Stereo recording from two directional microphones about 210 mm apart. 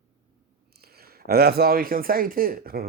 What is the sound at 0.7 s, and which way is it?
Speech, 45° right (ahead or behind).